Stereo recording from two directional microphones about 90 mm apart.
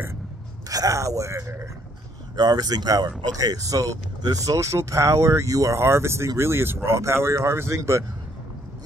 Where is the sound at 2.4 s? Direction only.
50° right (ahead or behind).